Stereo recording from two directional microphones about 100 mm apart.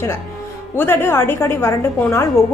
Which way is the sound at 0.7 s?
25° left (ahead or behind).